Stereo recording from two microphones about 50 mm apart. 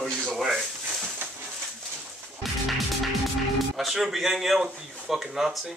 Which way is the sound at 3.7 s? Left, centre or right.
Centre.